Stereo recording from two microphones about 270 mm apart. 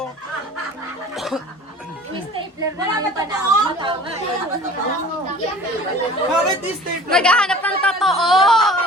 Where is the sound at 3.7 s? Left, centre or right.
Centre.